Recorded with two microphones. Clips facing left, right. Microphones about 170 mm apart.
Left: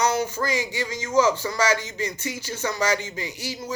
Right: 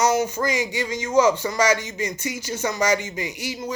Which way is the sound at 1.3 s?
20° right (ahead or behind).